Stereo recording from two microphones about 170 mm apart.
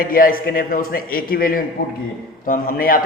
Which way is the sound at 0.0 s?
55° left (ahead or behind).